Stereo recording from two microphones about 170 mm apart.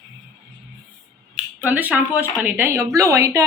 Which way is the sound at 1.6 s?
10° right (ahead or behind).